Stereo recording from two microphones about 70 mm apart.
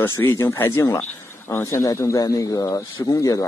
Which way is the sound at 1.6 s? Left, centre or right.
Left.